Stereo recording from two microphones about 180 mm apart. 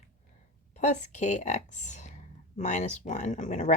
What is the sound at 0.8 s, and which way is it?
A woman's voice, 40° left (ahead or behind).